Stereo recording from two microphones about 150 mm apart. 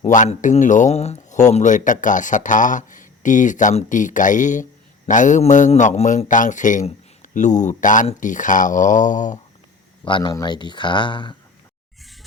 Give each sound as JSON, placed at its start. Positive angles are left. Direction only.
{"t": 0.0, "sound": "speech", "side_deg": 55}
{"t": 10.1, "sound": "speech", "side_deg": 35}